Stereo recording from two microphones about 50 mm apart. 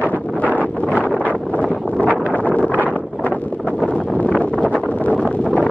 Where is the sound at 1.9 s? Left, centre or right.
Left.